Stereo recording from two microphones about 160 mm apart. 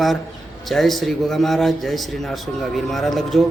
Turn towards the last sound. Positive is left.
turn(degrees=0)  # may be behind; listen again after turning